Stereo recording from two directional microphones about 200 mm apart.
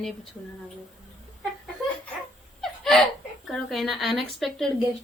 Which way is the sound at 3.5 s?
Centre (ahead or behind).